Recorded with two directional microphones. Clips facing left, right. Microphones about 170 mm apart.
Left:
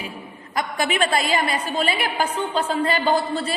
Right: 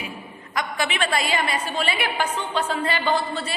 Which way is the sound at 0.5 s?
40° left (ahead or behind).